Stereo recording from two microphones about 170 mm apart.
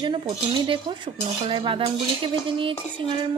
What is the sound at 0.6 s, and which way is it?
Speech, 25° right (ahead or behind).